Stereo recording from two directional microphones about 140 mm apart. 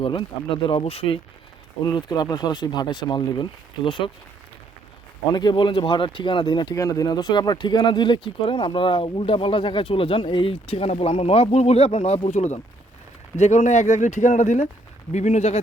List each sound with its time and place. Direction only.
0.0 s speech: 35° left (ahead or behind)
1.8 s speech: 25° left (ahead or behind)
5.3 s speech: 30° left (ahead or behind); by 15.6 s 50° left (ahead or behind)